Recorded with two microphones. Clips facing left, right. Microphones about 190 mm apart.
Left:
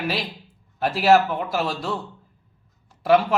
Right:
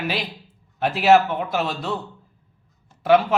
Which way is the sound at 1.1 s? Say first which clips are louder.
Right 1 dB; centre (ahead or behind).